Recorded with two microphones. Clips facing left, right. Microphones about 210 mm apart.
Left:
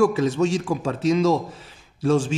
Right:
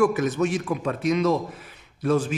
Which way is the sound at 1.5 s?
30° left (ahead or behind).